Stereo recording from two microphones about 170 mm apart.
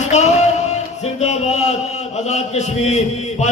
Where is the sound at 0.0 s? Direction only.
40° left (ahead or behind).